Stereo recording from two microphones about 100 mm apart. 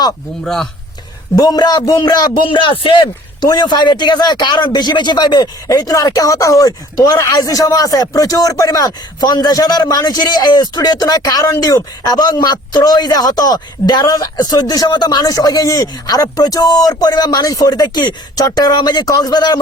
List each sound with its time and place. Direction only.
0.4 s speech: 5° left (ahead or behind)
1.4 s speech: 40° left (ahead or behind); by 3.0 s 55° left (ahead or behind)
3.4 s speech: 45° left (ahead or behind)